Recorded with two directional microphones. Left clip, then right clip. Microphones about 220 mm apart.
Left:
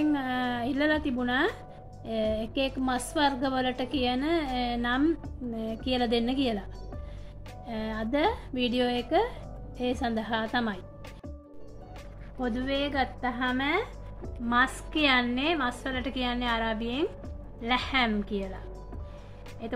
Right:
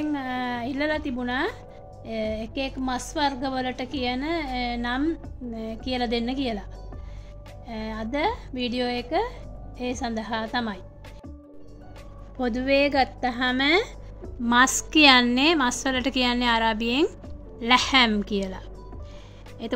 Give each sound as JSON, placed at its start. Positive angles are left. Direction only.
{"t": 0.0, "sound": "music", "side_deg": 0}
{"t": 2.0, "sound": "a woman's voice", "side_deg": 0}
{"t": 7.6, "sound": "a woman's voice", "side_deg": 0}
{"t": 12.4, "sound": "a woman's voice", "side_deg": -40}